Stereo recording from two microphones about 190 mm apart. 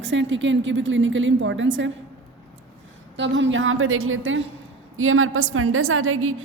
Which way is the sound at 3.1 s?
70° right (ahead or behind).